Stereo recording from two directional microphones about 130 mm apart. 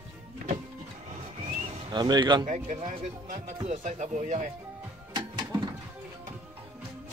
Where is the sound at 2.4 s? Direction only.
70° right (ahead or behind).